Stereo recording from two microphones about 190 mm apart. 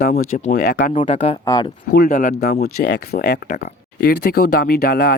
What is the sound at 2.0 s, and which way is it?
Speech, 45° left (ahead or behind).